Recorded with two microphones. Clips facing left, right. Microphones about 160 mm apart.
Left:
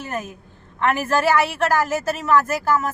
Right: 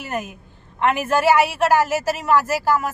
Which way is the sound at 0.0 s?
15° right (ahead or behind).